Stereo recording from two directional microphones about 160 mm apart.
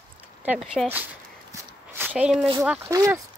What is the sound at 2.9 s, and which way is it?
Speech, 20° right (ahead or behind).